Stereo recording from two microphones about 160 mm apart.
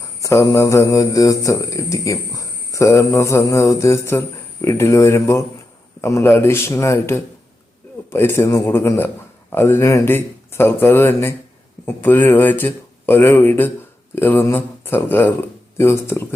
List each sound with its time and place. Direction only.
0.2 s speech: 20° left (ahead or behind)